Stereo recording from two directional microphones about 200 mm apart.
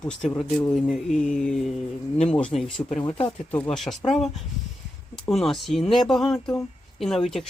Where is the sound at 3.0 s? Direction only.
25° left (ahead or behind).